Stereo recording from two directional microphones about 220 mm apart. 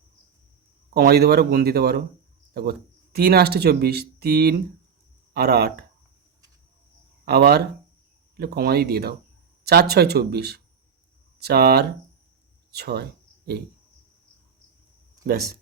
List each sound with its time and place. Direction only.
0.9 s speech: 45° right (ahead or behind)
7.3 s speech: 45° right (ahead or behind)